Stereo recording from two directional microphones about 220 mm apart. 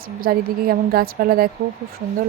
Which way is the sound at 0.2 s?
40° right (ahead or behind).